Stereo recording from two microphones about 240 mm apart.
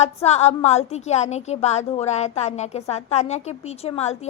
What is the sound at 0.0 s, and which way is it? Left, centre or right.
A woman's voice, left.